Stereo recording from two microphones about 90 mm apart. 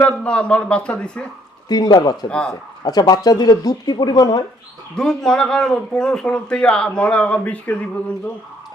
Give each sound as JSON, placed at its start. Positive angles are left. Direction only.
{"t": 0.0, "sound": "speech", "side_deg": 10}
{"t": 1.6, "sound": "speech", "side_deg": 50}
{"t": 2.3, "sound": "speech", "side_deg": 10}
{"t": 2.8, "sound": "speech", "side_deg": 45}
{"t": 4.9, "sound": "speech", "side_deg": 5}